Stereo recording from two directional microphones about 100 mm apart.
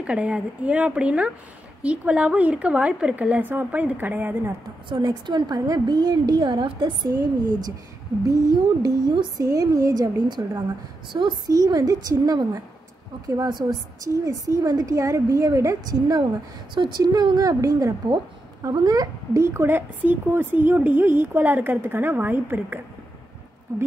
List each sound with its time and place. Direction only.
0.0 s a woman's voice: 10° right (ahead or behind)
5.0 s a woman's voice: 45° right (ahead or behind)
7.1 s a woman's voice: 40° right (ahead or behind)
9.4 s a woman's voice: 35° right (ahead or behind)
14.0 s a woman's voice: 35° right (ahead or behind)
16.7 s a woman's voice: 50° right (ahead or behind); by 22.8 s 20° right (ahead or behind)